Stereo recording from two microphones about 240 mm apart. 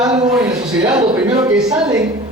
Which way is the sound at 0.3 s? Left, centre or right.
Centre.